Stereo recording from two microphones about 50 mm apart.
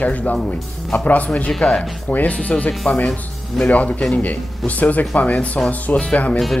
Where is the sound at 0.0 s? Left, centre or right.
Left.